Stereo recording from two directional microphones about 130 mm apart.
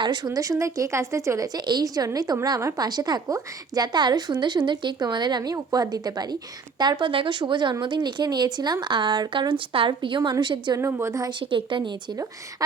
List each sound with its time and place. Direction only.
0.0 s a woman's voice: 35° right (ahead or behind)
0.3 s a woman's voice: 25° right (ahead or behind)
10.8 s a woman's voice: 20° right (ahead or behind)
11.3 s a woman's voice: 40° right (ahead or behind)